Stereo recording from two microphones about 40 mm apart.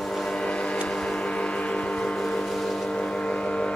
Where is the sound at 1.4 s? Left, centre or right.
Left.